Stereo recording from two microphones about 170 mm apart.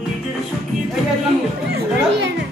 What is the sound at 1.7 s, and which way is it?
Chatter, 90° right.